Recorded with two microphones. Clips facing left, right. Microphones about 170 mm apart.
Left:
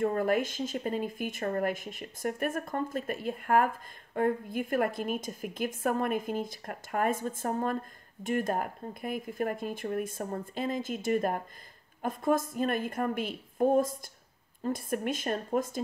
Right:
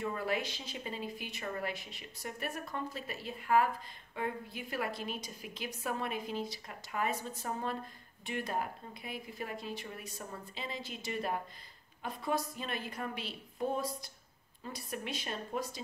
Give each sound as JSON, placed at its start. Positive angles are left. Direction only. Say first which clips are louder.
{"t": 0.0, "sound": "speech", "louder": "left 8 dB", "side_deg": 50}